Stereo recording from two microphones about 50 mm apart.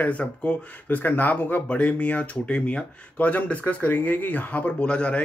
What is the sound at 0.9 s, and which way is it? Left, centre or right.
Speech, left.